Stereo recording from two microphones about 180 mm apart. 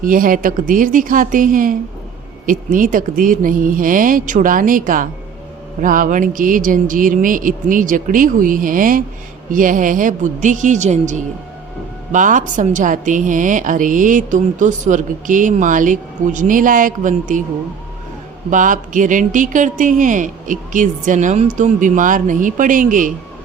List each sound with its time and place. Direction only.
0.0 s speech: 50° right (ahead or behind)
18.5 s speech: 45° right (ahead or behind)